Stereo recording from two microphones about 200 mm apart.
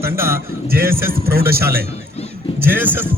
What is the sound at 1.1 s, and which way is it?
Speech, 50° right (ahead or behind).